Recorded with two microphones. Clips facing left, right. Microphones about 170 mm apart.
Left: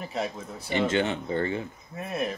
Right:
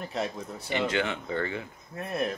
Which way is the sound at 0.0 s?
5° left (ahead or behind).